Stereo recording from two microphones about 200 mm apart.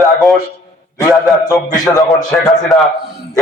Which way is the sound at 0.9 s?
20° left (ahead or behind).